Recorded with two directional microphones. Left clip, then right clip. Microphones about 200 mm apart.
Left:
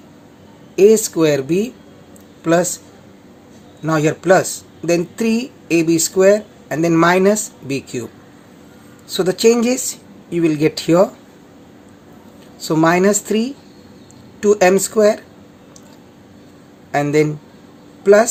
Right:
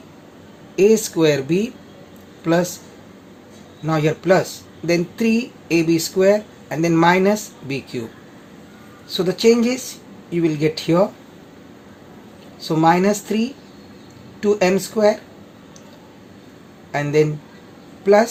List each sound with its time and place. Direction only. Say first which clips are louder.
0.8 s speech: left 3 dB; 25° left (ahead or behind)
3.8 s speech: left 3 dB; 30° left (ahead or behind)
9.1 s speech: left 2 dB; 30° left (ahead or behind)
12.6 s speech: left 2 dB; 30° left (ahead or behind)
16.9 s speech: left 2 dB; 30° left (ahead or behind)